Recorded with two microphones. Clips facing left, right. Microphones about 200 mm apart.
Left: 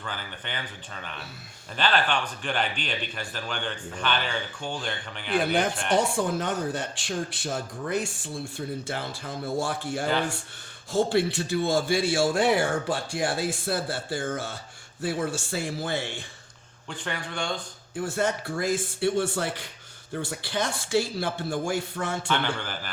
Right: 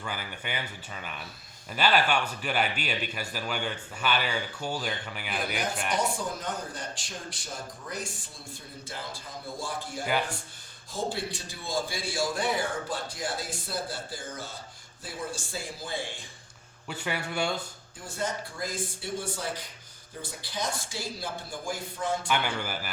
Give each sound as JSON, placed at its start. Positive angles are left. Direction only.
{"t": 0.0, "sound": "a man's voice", "side_deg": -10}
{"t": 1.7, "sound": "a man's voice", "side_deg": -10}
{"t": 6.1, "sound": "speech", "side_deg": 70}
{"t": 16.9, "sound": "a man's voice", "side_deg": -5}
{"t": 17.9, "sound": "speech", "side_deg": 75}
{"t": 22.3, "sound": "a man's voice", "side_deg": -10}